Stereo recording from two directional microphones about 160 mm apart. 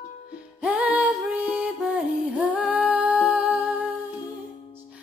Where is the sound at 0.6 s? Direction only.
10° right (ahead or behind).